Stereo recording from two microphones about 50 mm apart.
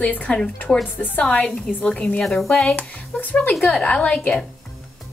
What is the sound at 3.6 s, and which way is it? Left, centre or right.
Speech, left.